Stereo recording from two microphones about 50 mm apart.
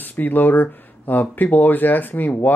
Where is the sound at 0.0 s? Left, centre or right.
Left.